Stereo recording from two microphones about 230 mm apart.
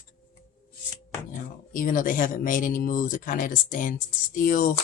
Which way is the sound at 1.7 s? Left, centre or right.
Left.